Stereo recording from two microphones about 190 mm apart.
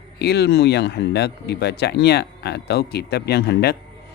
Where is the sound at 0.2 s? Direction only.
60° left (ahead or behind).